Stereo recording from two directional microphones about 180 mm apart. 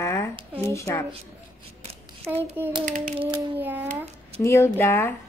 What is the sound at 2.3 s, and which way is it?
Speech, 10° right (ahead or behind).